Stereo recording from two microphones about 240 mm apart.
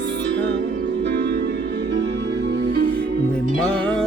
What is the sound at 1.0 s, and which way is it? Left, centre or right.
Music, right.